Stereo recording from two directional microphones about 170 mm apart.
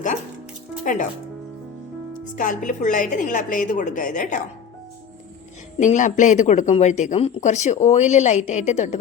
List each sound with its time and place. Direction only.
0.9 s speech: 50° left (ahead or behind)
2.3 s speech: 50° left (ahead or behind)
5.7 s speech: 45° left (ahead or behind)